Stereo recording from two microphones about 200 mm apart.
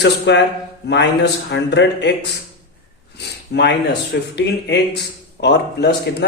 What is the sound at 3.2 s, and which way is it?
A man's voice, 60° left (ahead or behind).